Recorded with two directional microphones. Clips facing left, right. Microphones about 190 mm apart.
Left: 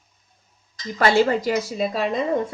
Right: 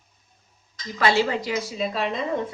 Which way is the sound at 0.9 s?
45° left (ahead or behind).